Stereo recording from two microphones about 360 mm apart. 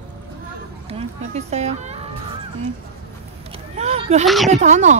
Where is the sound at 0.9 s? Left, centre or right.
Centre.